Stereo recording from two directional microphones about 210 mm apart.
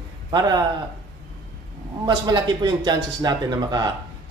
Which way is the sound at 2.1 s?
20° right (ahead or behind).